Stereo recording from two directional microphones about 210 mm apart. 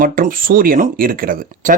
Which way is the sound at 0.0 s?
40° right (ahead or behind).